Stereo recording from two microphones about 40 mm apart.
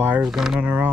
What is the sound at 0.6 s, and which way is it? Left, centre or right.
Speech, right.